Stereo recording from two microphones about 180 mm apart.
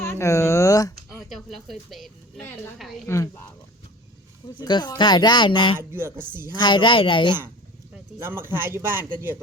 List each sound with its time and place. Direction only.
0.0 s a sound: 15° left (ahead or behind)
1.5 s speech: centre (ahead or behind)
3.1 s speech: 15° left (ahead or behind)
4.6 s speech: 25° left (ahead or behind)
5.9 s speech: 15° right (ahead or behind)
6.6 s speech: 25° left (ahead or behind)
8.2 s speech: 10° right (ahead or behind)